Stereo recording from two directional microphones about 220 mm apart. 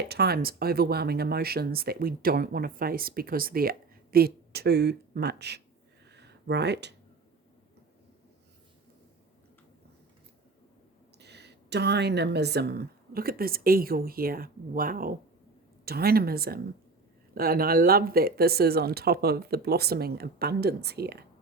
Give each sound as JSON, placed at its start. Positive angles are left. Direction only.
{"t": 0.1, "sound": "speech", "side_deg": -45}
{"t": 6.1, "sound": "a sound", "side_deg": -50}
{"t": 11.2, "sound": "speech", "side_deg": -50}